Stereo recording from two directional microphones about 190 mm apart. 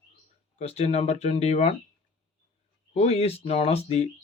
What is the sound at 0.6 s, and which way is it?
Speech, 35° left (ahead or behind).